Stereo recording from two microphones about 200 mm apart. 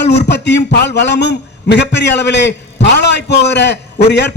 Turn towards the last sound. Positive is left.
turn(degrees=60)  # may be behind; listen again after turning